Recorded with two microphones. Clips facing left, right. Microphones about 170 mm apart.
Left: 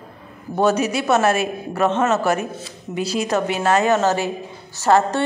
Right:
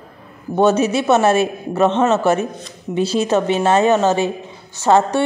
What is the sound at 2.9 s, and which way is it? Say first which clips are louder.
A woman's voice: right 4 dB; 25° right (ahead or behind).